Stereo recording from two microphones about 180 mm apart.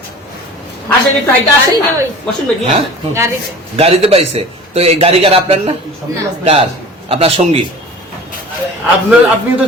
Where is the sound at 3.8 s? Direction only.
35° right (ahead or behind).